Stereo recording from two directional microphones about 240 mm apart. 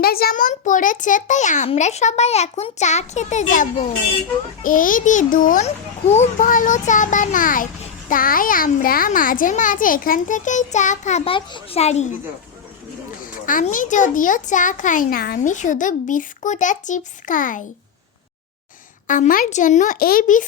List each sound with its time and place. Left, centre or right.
0.0 s a child's voice: left
13.4 s a child's voice: left
19.0 s a child's voice: left